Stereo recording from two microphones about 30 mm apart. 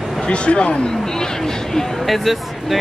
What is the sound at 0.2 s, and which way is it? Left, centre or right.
Speech, left.